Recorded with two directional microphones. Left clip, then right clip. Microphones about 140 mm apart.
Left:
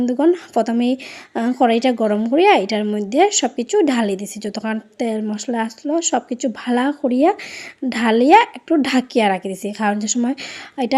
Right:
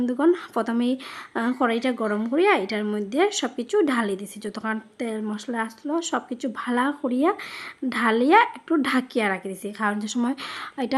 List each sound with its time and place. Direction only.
0.0 s a woman's voice: 15° left (ahead or behind)